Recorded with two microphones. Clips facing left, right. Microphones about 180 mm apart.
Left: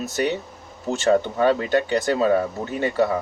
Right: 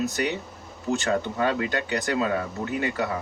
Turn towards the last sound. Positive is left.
turn(degrees=30)  # may be behind; listen again after turning